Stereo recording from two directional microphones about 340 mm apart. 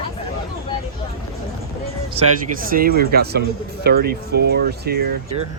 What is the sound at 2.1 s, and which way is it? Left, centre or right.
Speech, right.